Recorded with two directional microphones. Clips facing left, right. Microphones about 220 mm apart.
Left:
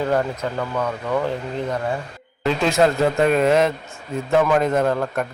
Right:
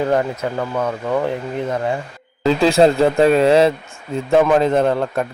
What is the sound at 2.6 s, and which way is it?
A man's voice, 30° right (ahead or behind).